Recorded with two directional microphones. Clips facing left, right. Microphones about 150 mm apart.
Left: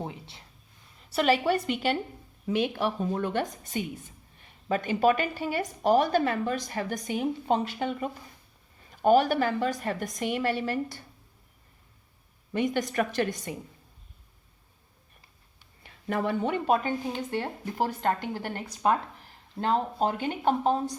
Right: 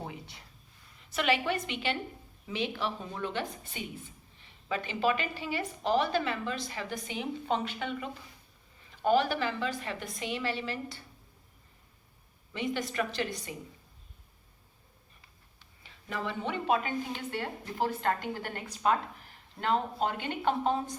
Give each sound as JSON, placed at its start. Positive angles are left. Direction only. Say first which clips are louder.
{"t": 0.0, "sound": "a sound", "louder": "left 4 dB", "side_deg": 25}
{"t": 1.1, "sound": "a woman's voice", "louder": "left 5 dB", "side_deg": 40}
{"t": 12.5, "sound": "a woman's voice", "louder": "left 6 dB", "side_deg": 50}
{"t": 15.8, "sound": "a woman's voice", "louder": "left 7 dB", "side_deg": 55}
{"t": 18.6, "sound": "speech", "louder": "left 3 dB", "side_deg": 10}
{"t": 19.5, "sound": "speech", "louder": "left 3 dB", "side_deg": 35}